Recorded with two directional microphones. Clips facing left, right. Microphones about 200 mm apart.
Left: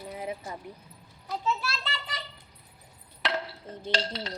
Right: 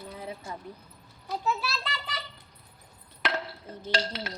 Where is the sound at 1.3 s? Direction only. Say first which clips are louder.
Even; 5° right (ahead or behind).